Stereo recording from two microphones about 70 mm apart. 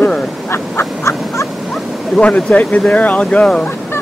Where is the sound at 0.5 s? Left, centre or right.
Left.